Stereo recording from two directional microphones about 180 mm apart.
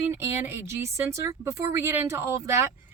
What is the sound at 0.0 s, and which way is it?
Speech, 15° right (ahead or behind).